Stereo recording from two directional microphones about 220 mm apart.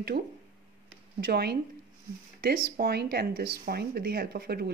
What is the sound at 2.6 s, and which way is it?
Speech, 45° right (ahead or behind).